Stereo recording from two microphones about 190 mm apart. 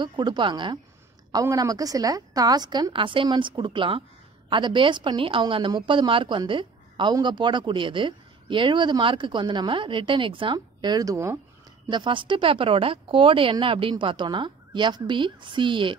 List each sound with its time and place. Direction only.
0.0 s a woman's voice: 25° right (ahead or behind)